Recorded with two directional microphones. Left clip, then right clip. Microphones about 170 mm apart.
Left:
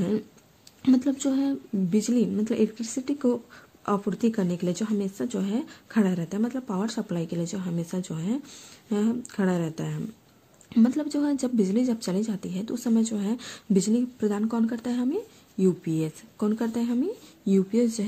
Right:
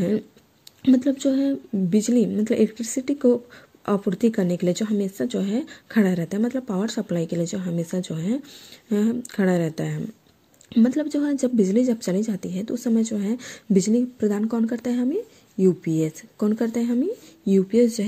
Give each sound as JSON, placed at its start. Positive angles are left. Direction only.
{"t": 0.8, "sound": "speech", "side_deg": -15}